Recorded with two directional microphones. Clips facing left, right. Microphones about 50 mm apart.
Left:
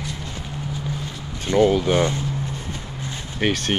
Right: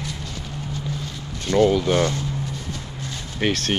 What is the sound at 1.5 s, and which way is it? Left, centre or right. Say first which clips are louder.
Speech: even; left.